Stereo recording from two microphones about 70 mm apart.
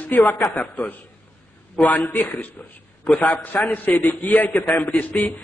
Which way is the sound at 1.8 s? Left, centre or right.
Left.